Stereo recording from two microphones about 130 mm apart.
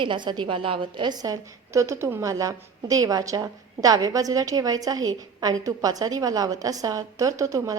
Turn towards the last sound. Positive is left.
turn(degrees=-25)  # may be behind; listen again after turning